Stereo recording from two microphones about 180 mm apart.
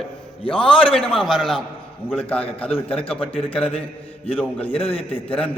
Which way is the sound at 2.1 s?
30° left (ahead or behind).